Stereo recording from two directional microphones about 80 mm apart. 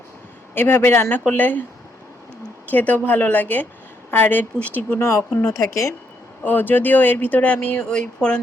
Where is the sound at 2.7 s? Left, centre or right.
Left.